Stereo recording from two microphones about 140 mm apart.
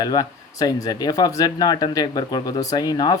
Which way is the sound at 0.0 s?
25° left (ahead or behind).